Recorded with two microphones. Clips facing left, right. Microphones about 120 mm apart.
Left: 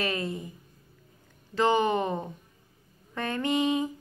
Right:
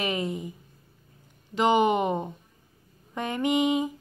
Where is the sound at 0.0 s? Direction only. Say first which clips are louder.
Right 2 dB; 15° right (ahead or behind).